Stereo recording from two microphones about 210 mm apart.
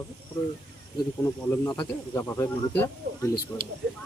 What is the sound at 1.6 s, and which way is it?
Speech, 15° left (ahead or behind).